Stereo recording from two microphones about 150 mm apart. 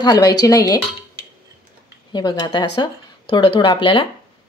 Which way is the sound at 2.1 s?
30° left (ahead or behind).